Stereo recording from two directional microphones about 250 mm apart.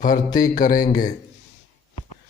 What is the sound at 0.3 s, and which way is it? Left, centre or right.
Speech, centre.